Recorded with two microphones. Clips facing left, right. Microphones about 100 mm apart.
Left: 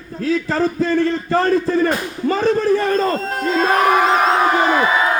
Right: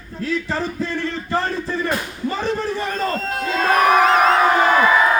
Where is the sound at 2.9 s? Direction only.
35° left (ahead or behind).